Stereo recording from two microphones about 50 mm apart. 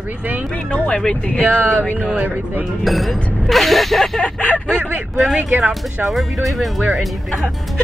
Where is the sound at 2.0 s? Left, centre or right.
Right.